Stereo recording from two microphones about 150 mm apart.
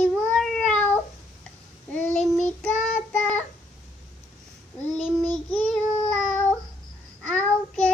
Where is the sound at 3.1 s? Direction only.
10° left (ahead or behind).